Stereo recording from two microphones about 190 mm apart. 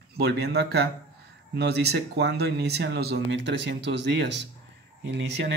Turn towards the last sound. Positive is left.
turn(degrees=-65)  # may be behind; listen again after turning